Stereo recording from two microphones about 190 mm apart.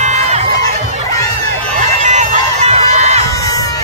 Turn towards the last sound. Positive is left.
turn(degrees=-35)  # may be behind; listen again after turning